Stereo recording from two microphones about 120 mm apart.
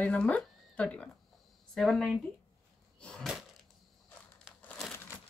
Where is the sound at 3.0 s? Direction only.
5° left (ahead or behind).